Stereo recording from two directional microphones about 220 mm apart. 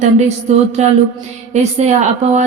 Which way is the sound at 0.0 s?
30° right (ahead or behind).